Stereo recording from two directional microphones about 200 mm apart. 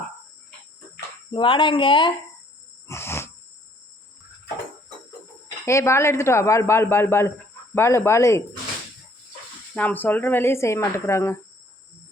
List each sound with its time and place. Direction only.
1.3 s speech: 25° left (ahead or behind)
2.8 s insect: 15° left (ahead or behind)
5.6 s speech: 15° left (ahead or behind)
9.7 s speech: 10° left (ahead or behind)